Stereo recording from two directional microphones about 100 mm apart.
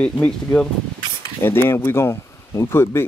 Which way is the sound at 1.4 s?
25° left (ahead or behind).